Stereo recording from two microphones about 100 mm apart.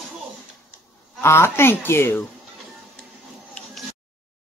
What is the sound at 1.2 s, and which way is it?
A woman's voice, 25° left (ahead or behind).